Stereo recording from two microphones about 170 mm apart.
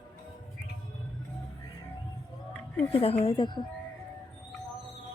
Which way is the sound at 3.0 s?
35° left (ahead or behind).